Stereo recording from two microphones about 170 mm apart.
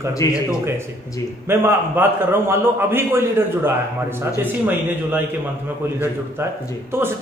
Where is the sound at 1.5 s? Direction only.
15° right (ahead or behind).